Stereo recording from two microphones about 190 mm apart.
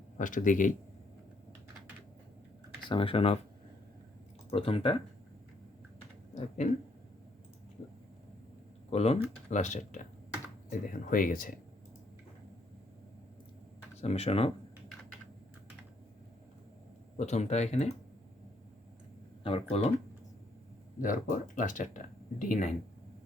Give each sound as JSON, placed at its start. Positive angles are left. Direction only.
{"t": 0.2, "sound": "speech", "side_deg": 45}
{"t": 2.8, "sound": "speech", "side_deg": 25}
{"t": 4.5, "sound": "speech", "side_deg": 30}
{"t": 6.6, "sound": "speech", "side_deg": 40}
{"t": 8.9, "sound": "speech", "side_deg": 35}
{"t": 14.0, "sound": "speech", "side_deg": 30}
{"t": 17.2, "sound": "speech", "side_deg": 35}
{"t": 19.4, "sound": "speech", "side_deg": 30}
{"t": 21.0, "sound": "speech", "side_deg": 45}